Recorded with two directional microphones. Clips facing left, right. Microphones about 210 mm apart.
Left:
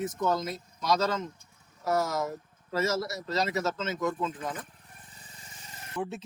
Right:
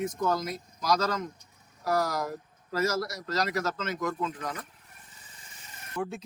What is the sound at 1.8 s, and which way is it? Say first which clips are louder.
Speech: even; 25° left (ahead or behind).